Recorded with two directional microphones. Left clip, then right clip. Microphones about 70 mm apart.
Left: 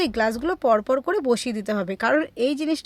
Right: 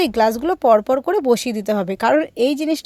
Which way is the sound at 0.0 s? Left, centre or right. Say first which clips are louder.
Right 6 dB; right.